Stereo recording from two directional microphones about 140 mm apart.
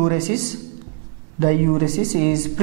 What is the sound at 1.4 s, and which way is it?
Speech, 10° right (ahead or behind).